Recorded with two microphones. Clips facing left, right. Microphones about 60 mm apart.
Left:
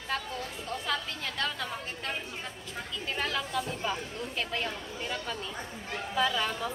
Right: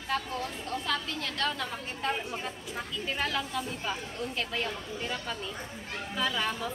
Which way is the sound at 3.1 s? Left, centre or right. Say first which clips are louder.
Even; centre.